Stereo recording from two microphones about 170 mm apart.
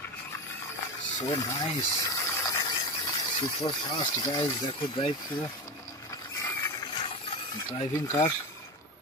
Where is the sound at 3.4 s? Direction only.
25° left (ahead or behind).